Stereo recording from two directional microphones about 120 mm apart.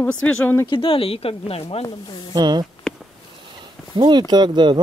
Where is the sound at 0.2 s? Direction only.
10° left (ahead or behind).